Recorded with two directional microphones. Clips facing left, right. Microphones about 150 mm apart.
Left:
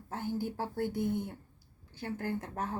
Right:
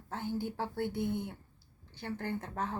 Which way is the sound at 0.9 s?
40° left (ahead or behind).